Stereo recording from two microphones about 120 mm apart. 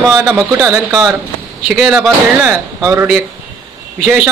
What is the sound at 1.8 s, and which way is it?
A man's voice, 5° right (ahead or behind).